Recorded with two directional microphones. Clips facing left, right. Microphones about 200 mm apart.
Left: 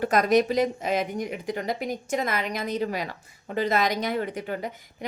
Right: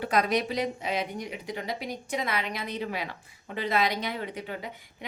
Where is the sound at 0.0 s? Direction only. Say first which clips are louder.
Left 5 dB; 45° left (ahead or behind).